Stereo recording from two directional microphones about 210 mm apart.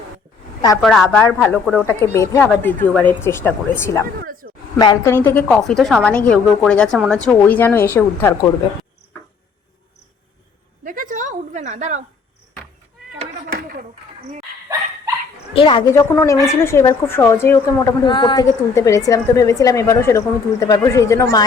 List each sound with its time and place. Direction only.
0.8 s a woman's voice: centre (ahead or behind)
4.2 s a sound: 40° right (ahead or behind)
4.8 s a woman's voice: 15° left (ahead or behind)
10.8 s a woman's voice: 40° right (ahead or behind)
15.5 s a woman's voice: 25° left (ahead or behind)